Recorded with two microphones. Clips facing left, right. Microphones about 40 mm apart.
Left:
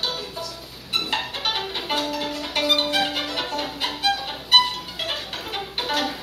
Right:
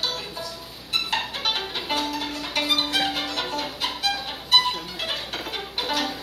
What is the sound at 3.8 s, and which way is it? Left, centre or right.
Music, left.